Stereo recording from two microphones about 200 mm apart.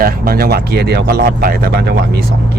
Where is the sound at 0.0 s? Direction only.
50° right (ahead or behind).